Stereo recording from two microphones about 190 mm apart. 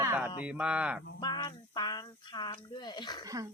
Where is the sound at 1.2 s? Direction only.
20° left (ahead or behind).